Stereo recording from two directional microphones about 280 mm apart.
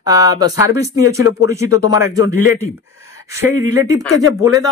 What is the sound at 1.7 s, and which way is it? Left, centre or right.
Speech, left.